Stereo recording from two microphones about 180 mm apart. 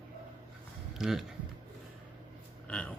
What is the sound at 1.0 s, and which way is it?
Speech, centre (ahead or behind).